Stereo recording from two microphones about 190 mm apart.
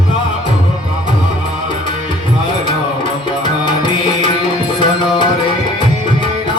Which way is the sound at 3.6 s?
25° left (ahead or behind).